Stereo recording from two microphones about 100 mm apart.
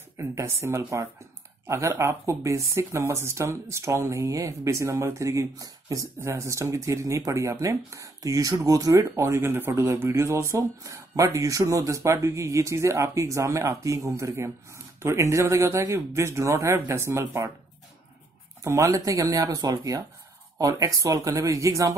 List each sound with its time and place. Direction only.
0.2 s speech: 30° right (ahead or behind)
18.6 s speech: 30° right (ahead or behind)